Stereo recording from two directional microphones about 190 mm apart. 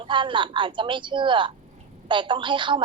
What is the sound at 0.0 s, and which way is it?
A woman's voice, 25° right (ahead or behind).